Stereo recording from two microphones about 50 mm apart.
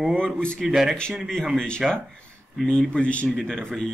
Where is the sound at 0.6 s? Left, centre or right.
Centre.